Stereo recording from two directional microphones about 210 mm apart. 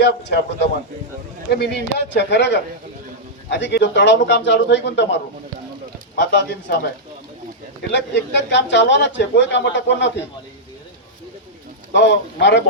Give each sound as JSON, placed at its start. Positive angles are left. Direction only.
{"t": 0.0, "sound": "a man's voice", "side_deg": 50}
{"t": 7.8, "sound": "a man's voice", "side_deg": 55}
{"t": 11.9, "sound": "a man's voice", "side_deg": 55}